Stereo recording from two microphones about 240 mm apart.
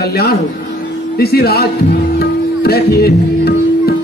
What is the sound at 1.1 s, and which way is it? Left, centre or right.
Music, left.